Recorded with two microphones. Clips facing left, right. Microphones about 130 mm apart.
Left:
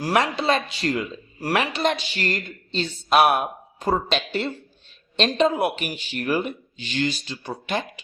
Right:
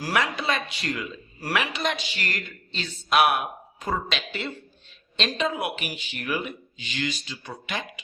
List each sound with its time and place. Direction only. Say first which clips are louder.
0.0 s speech: left 5 dB; 30° left (ahead or behind)